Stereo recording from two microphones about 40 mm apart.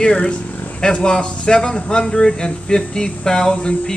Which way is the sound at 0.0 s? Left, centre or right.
Left.